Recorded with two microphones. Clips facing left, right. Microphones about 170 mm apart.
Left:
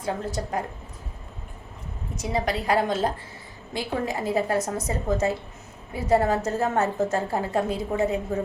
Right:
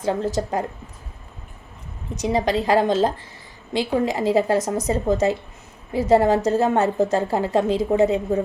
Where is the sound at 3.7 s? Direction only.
90° right.